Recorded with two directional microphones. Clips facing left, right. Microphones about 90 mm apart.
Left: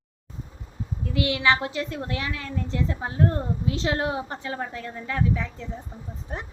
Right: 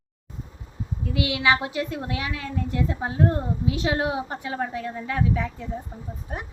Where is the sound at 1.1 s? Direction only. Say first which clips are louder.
Even; 15° right (ahead or behind).